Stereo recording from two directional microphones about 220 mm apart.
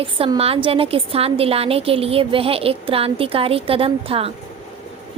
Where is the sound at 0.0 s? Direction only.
25° right (ahead or behind).